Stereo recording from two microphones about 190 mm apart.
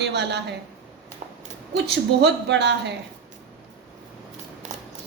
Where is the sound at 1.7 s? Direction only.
65° right (ahead or behind).